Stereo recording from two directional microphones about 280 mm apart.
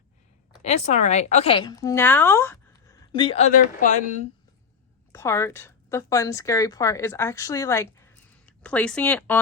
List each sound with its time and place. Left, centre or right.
0.6 s a woman's voice: left
5.1 s speech: centre